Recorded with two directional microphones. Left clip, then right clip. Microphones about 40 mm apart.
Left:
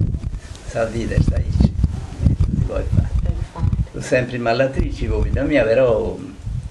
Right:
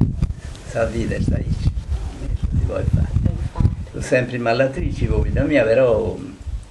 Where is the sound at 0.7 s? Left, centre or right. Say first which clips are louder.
Even; right.